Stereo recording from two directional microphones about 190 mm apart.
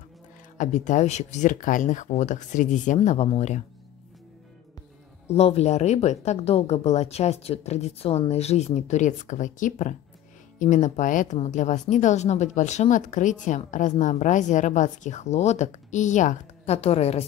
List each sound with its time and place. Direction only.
0.6 s a woman's voice: 40° left (ahead or behind)
5.3 s a woman's voice: 35° left (ahead or behind)